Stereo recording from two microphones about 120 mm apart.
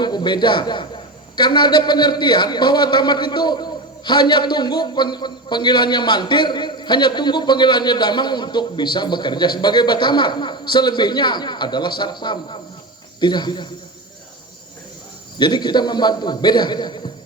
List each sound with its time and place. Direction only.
0.0 s a man's voice: 40° left (ahead or behind)
15.4 s a man's voice: 35° left (ahead or behind)